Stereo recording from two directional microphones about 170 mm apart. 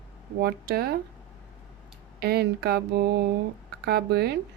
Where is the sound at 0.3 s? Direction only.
70° right (ahead or behind).